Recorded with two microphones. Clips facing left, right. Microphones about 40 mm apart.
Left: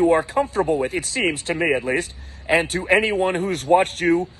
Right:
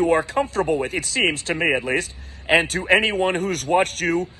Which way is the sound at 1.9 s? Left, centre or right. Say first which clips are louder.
Even; right.